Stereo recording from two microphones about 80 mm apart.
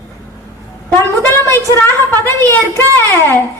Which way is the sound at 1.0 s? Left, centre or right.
Left.